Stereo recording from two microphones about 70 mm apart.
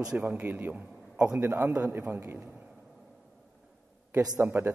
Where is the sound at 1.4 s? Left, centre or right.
Right.